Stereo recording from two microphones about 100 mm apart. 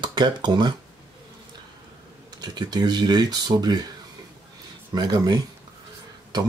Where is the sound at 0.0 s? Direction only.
50° right (ahead or behind).